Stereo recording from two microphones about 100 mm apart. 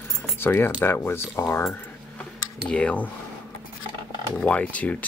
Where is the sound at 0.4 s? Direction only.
20° left (ahead or behind).